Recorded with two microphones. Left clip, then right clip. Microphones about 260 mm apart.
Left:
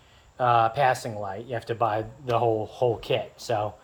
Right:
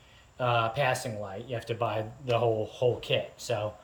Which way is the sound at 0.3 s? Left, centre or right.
Centre.